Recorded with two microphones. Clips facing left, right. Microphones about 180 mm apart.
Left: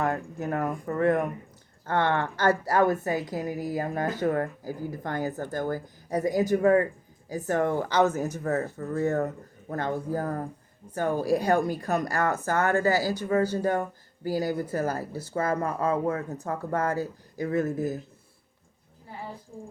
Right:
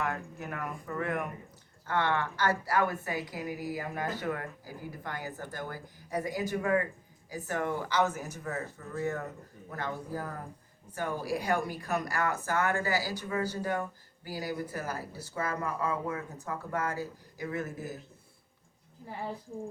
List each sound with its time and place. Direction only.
0.0 s a woman's voice: 45° left (ahead or behind)